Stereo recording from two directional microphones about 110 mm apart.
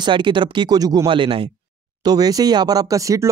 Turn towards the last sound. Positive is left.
turn(degrees=-30)  # may be behind; listen again after turning